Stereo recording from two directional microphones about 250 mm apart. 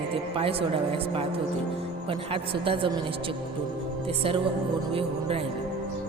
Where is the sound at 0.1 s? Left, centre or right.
Right.